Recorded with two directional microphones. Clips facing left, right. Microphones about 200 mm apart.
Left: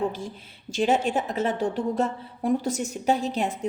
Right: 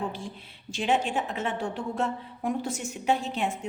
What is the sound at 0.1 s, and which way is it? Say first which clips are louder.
A woman's voice: left 3 dB; 40° left (ahead or behind).